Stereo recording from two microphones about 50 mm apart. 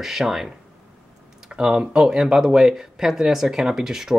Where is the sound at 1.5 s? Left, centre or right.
Centre.